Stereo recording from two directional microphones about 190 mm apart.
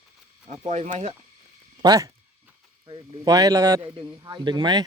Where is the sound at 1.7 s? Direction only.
20° right (ahead or behind).